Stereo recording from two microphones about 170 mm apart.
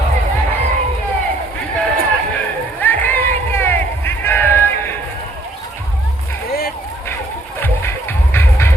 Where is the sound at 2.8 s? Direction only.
10° left (ahead or behind).